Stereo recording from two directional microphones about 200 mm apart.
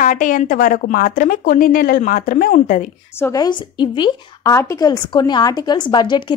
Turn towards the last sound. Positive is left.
turn(degrees=20)  # may be behind; listen again after turning